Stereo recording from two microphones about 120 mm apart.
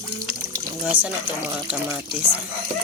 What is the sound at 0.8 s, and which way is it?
Speech, 10° right (ahead or behind).